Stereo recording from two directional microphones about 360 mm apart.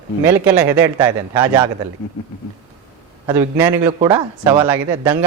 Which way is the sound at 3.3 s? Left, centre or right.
Centre.